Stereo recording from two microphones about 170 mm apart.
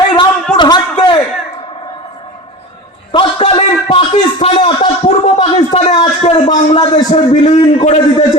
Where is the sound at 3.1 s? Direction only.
30° left (ahead or behind).